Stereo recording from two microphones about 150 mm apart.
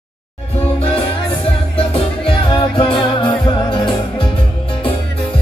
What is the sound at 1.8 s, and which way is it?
Music, 35° left (ahead or behind).